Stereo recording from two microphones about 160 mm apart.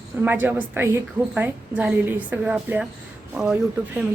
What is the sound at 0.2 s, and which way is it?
A woman's voice, 10° right (ahead or behind).